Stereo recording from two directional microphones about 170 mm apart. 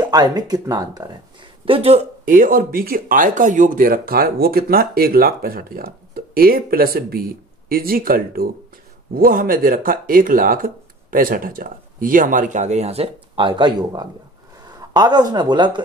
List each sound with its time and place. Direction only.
0.0 s speech: 25° right (ahead or behind)
1.7 s speech: 35° right (ahead or behind)
2.2 s speech: 50° right (ahead or behind); by 15.8 s 25° right (ahead or behind)